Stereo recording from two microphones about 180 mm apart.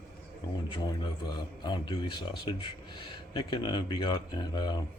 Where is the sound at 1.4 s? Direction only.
25° left (ahead or behind).